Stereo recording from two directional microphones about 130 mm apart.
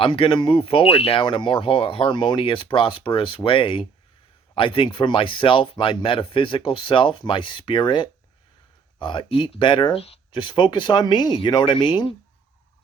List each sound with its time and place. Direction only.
0.0 s speech: 45° left (ahead or behind)